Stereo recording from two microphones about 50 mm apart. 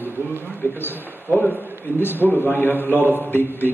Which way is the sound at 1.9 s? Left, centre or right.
Left.